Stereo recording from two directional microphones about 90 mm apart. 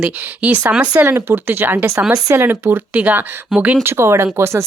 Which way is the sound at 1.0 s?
25° right (ahead or behind).